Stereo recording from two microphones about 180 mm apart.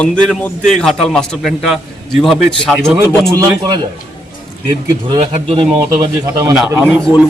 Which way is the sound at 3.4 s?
20° right (ahead or behind).